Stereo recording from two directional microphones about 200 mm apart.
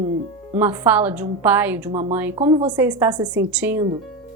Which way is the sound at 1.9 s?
25° right (ahead or behind).